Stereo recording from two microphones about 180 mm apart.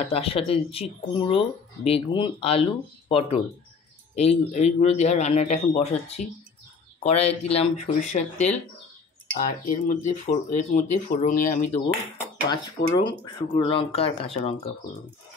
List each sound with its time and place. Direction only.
0.0 s speech: 35° left (ahead or behind)
9.3 s speech: 50° left (ahead or behind)
13.2 s speech: 25° left (ahead or behind)